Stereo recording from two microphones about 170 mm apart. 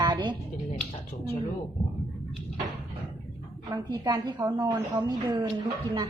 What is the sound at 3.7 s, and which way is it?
A woman's voice, 25° right (ahead or behind).